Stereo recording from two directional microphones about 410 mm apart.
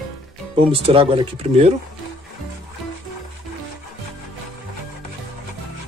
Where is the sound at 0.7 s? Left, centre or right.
Centre.